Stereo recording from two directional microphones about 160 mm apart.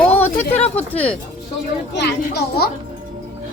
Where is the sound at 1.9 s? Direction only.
90° left.